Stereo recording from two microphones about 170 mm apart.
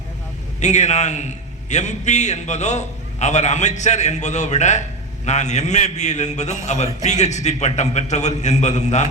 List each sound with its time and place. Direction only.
0.6 s a man's voice: 45° left (ahead or behind)